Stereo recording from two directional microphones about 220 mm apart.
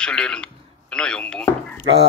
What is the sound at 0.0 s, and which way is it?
A man's voice, 5° left (ahead or behind).